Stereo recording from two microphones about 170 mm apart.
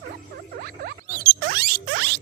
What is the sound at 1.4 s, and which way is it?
Rodents, 60° right (ahead or behind).